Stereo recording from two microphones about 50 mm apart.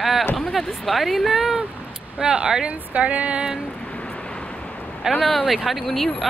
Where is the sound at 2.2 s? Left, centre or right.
Centre.